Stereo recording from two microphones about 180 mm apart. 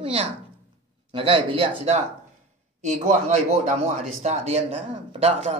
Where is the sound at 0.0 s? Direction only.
30° right (ahead or behind).